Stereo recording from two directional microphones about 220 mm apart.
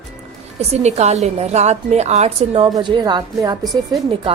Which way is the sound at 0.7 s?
30° right (ahead or behind).